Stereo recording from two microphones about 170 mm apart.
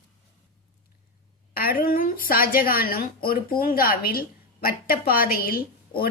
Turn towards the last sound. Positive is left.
turn(degrees=60)  # may be behind; listen again after turning